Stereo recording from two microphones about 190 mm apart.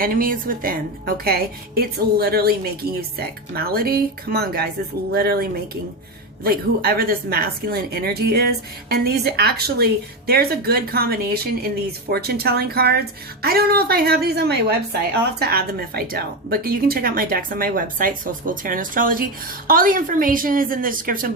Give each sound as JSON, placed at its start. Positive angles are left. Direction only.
{"t": 0.0, "sound": "a woman's voice", "side_deg": -50}